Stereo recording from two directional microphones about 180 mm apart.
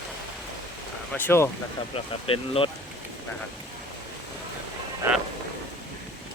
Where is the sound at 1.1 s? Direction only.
10° left (ahead or behind).